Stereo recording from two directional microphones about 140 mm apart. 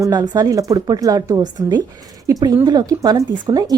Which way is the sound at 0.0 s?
30° right (ahead or behind).